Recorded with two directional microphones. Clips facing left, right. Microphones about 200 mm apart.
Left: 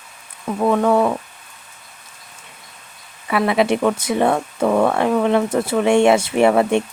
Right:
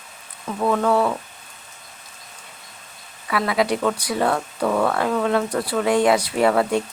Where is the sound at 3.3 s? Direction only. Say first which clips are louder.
Left 4 dB; 25° left (ahead or behind).